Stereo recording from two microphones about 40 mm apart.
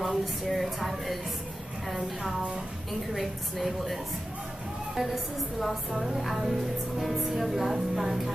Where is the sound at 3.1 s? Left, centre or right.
Centre.